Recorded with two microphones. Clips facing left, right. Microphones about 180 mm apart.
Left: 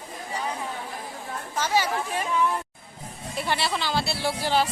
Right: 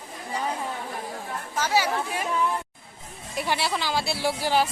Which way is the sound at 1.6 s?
10° right (ahead or behind).